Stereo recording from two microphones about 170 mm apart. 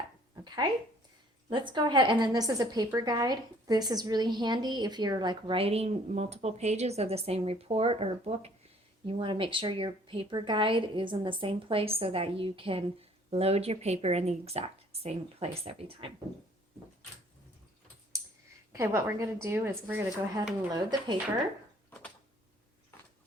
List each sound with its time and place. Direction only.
0.4 s a sound: 25° right (ahead or behind)
1.5 s a woman's voice: 30° right (ahead or behind)
18.7 s a woman's voice: 15° right (ahead or behind)